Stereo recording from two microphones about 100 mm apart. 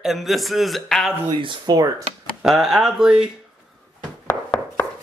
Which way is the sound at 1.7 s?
40° right (ahead or behind).